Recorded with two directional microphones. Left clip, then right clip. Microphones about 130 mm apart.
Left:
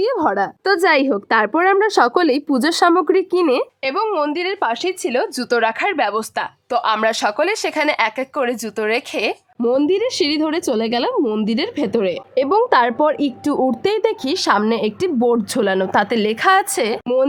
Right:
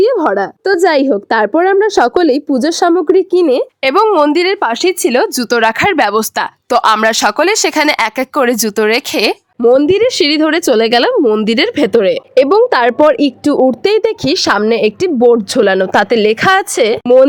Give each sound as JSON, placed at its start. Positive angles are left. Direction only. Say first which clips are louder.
{"t": 0.0, "sound": "a woman's voice", "louder": "right 6 dB", "side_deg": -30}
{"t": 3.8, "sound": "speech", "louder": "right 12 dB", "side_deg": -70}
{"t": 9.6, "sound": "a woman's voice", "louder": "right 8 dB", "side_deg": -60}